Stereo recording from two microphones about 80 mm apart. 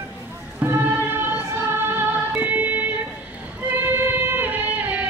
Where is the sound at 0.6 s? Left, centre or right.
Right.